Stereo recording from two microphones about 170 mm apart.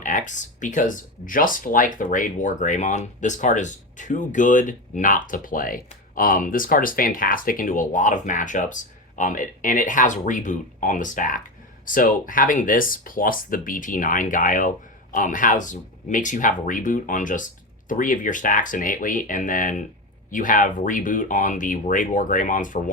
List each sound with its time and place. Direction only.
0.0 s speech: 50° left (ahead or behind)